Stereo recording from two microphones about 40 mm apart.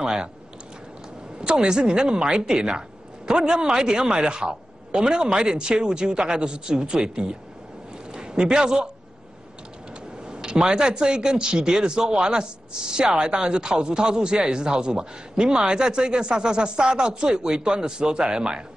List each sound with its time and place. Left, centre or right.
0.0 s speech: centre
1.4 s a man's voice: right
10.2 s speech: right